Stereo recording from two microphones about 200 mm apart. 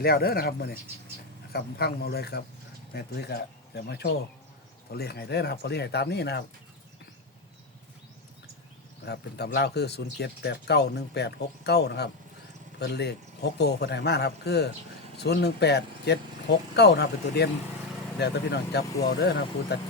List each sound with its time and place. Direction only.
0.0 s speech: 50° left (ahead or behind)
9.0 s speech: 55° left (ahead or behind)